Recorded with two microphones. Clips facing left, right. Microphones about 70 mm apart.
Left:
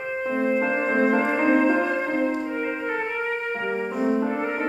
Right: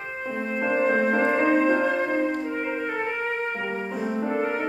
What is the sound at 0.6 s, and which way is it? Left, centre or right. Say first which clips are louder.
Music: even; centre.